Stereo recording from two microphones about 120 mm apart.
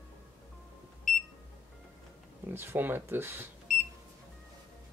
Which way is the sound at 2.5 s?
20° right (ahead or behind).